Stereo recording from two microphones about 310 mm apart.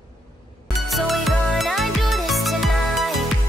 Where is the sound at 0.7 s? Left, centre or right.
Centre.